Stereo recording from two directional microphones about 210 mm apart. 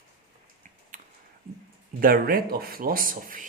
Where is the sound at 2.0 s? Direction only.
45° right (ahead or behind).